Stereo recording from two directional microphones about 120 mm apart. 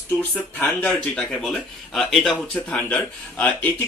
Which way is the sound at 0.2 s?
15° left (ahead or behind).